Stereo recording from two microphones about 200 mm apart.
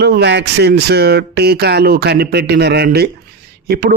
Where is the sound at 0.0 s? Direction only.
55° right (ahead or behind).